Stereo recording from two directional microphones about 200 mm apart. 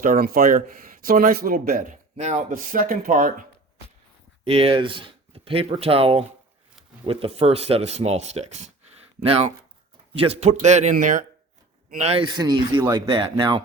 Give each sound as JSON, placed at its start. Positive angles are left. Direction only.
{"t": 0.0, "sound": "speech", "side_deg": -45}
{"t": 4.4, "sound": "speech", "side_deg": -30}